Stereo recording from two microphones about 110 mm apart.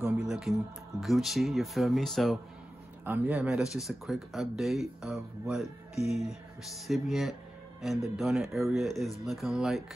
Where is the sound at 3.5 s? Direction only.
5° right (ahead or behind).